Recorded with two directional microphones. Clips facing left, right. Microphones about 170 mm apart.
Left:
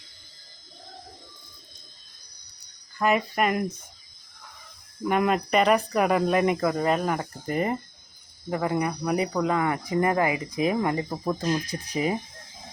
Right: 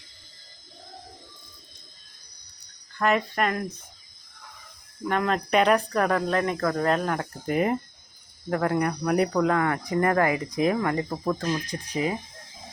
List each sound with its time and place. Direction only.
3.0 s speech: 10° left (ahead or behind)
5.0 s speech: 10° left (ahead or behind)
11.1 s speech: 10° left (ahead or behind)